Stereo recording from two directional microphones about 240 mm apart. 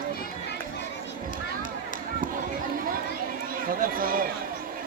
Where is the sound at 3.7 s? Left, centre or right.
Right.